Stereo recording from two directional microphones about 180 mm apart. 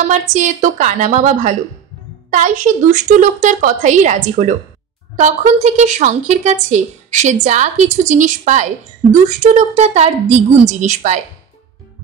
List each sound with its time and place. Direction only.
0.1 s a woman's voice: 45° right (ahead or behind)